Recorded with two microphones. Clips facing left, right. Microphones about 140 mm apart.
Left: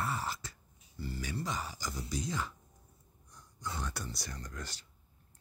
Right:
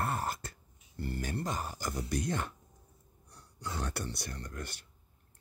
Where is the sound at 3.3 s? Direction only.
70° right (ahead or behind); by 4.8 s 55° right (ahead or behind).